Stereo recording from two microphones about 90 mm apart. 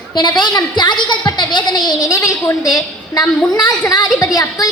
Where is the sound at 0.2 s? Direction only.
55° left (ahead or behind).